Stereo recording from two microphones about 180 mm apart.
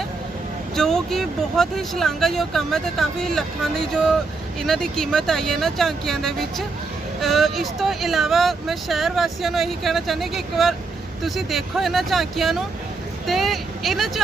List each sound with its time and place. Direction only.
0.8 s speech: centre (ahead or behind)